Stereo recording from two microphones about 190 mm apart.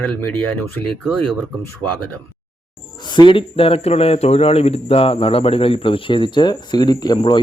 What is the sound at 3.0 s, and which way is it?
Speech, 25° left (ahead or behind).